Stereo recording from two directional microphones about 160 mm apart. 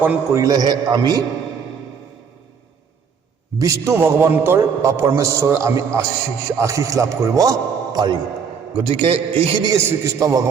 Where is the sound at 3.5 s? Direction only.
20° right (ahead or behind).